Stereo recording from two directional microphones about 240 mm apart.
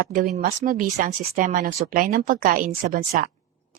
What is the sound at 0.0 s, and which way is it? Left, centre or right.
Speech, right.